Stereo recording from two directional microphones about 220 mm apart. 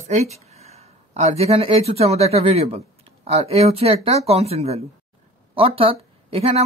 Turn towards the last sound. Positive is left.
turn(degrees=-25)  # may be behind; listen again after turning